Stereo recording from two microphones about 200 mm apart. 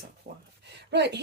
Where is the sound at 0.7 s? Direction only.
60° right (ahead or behind).